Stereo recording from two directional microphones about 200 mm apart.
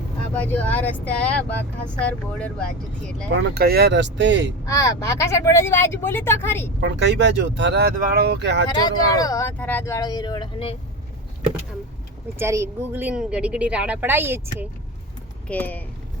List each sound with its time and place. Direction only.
0.3 s speech: 10° left (ahead or behind)
3.3 s speech: 50° right (ahead or behind)
4.6 s speech: 15° left (ahead or behind)
6.7 s speech: 60° right (ahead or behind)
8.8 s speech: 20° left (ahead or behind)
12.4 s a woman's voice: 15° right (ahead or behind)
15.4 s speech: 10° left (ahead or behind)